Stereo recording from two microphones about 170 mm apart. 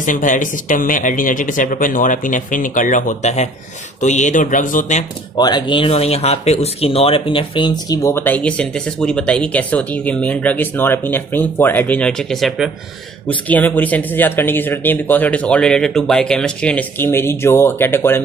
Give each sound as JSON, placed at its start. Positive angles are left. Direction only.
{"t": 0.0, "sound": "speech", "side_deg": 50}
{"t": 5.4, "sound": "speech", "side_deg": 25}
{"t": 13.3, "sound": "speech", "side_deg": 10}